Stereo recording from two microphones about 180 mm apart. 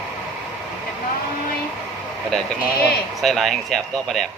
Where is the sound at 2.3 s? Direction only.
Centre (ahead or behind).